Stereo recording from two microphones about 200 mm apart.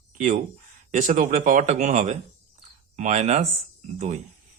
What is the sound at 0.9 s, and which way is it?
Speech, 40° right (ahead or behind).